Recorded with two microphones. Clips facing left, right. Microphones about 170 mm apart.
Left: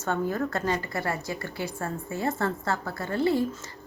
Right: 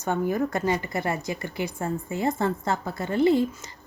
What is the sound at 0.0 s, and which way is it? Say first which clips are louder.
A woman's voice: right 3 dB; 15° right (ahead or behind).